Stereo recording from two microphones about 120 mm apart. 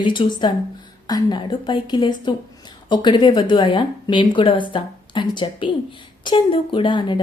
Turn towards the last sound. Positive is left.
turn(degrees=40)  # may be behind; listen again after turning